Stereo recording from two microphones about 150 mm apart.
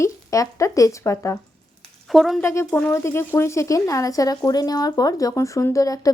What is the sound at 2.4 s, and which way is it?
Speech, 20° left (ahead or behind).